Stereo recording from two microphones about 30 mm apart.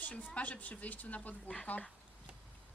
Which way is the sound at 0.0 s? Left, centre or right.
Left.